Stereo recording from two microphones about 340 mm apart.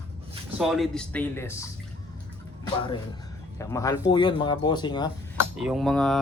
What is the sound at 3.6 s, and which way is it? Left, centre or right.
Speech, centre.